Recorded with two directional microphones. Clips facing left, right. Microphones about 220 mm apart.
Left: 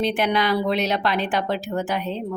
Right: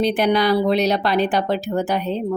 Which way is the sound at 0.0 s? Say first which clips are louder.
Right 4 dB; 40° right (ahead or behind).